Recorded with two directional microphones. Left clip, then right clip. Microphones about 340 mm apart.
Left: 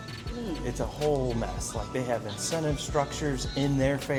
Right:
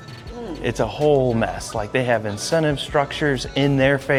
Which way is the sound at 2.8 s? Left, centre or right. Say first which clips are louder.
Right 9 dB; right.